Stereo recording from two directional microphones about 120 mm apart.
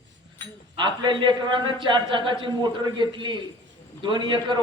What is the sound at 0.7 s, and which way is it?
Speech, 40° right (ahead or behind).